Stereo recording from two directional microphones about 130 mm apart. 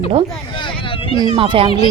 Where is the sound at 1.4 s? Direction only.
40° right (ahead or behind).